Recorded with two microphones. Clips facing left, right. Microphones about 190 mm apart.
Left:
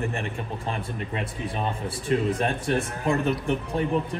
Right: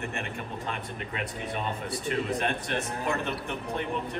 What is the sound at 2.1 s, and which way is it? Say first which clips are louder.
A man's voice: left 5 dB; 35° left (ahead or behind).